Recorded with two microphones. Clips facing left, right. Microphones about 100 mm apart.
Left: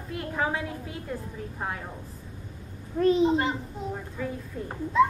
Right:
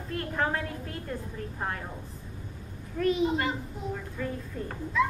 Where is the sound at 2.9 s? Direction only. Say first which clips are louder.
Left 5 dB; 30° left (ahead or behind).